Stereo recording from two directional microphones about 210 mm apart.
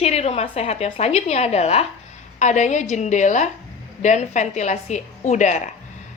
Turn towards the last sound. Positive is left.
turn(degrees=35)  # may be behind; listen again after turning